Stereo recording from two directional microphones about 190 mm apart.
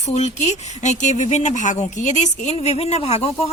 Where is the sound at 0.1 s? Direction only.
35° left (ahead or behind).